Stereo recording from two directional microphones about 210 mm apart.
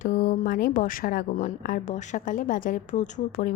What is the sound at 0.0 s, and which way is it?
A woman's voice, 40° left (ahead or behind).